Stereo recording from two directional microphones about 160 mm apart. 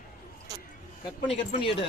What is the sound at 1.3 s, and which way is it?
Speech, 35° left (ahead or behind).